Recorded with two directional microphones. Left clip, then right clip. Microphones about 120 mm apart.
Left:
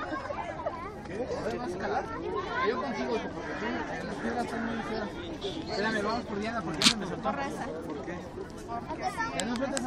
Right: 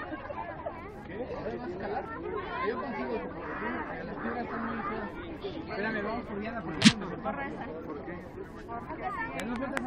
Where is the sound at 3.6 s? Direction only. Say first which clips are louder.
Left 2 dB; 55° left (ahead or behind).